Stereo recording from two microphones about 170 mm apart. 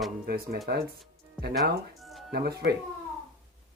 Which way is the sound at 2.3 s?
70° right (ahead or behind).